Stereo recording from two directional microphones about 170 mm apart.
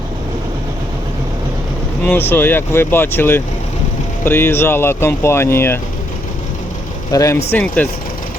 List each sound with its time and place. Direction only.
2.0 s speech: 10° left (ahead or behind)
7.1 s speech: 20° left (ahead or behind)